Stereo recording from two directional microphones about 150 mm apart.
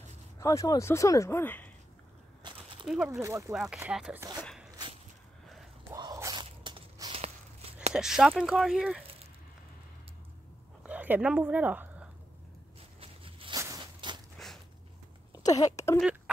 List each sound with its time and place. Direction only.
0.4 s speech: 20° left (ahead or behind)
3.1 s speech: 20° right (ahead or behind)
3.5 s speech: 5° right (ahead or behind)
4.6 s walk: 30° right (ahead or behind)
5.9 s biting: 25° right (ahead or behind); by 7.9 s 40° right (ahead or behind)
7.9 s speech: 5° right (ahead or behind)
10.8 s dog: 10° right (ahead or behind)
13.0 s zipper: 35° right (ahead or behind)
13.6 s walk: 25° right (ahead or behind)
15.3 s a sound: 25° left (ahead or behind)